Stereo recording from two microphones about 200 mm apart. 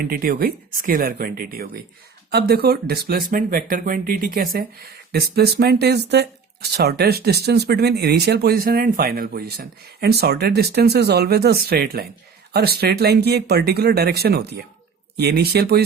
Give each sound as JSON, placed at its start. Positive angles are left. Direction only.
{"t": 0.0, "sound": "speech", "side_deg": -45}